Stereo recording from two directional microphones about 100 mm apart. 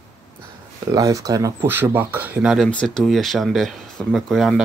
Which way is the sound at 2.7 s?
10° left (ahead or behind).